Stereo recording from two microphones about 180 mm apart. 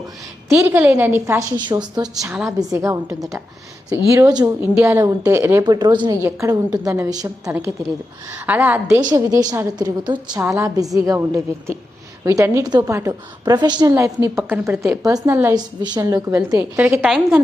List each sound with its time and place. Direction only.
0.4 s a woman's voice: 15° right (ahead or behind)
9.0 s a woman's voice: 20° right (ahead or behind)
17.0 s a woman's voice: centre (ahead or behind)